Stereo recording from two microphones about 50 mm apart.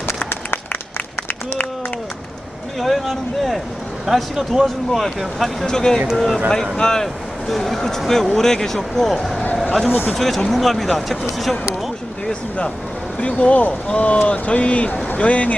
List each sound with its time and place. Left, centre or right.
0.3 s a sound: left
2.7 s speech: centre
12.3 s speech: left